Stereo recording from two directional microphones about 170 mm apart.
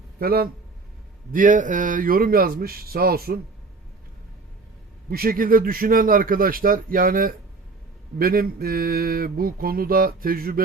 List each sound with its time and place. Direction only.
0.2 s mantra: 60° right (ahead or behind)
1.3 s mantra: 50° right (ahead or behind)
5.0 s mantra: 60° right (ahead or behind)